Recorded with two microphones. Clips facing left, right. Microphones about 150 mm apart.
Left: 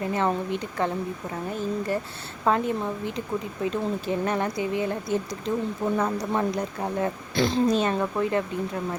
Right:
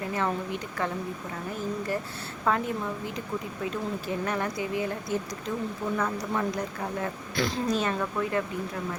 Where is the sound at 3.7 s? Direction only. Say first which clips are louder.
Left 5 dB; 25° left (ahead or behind).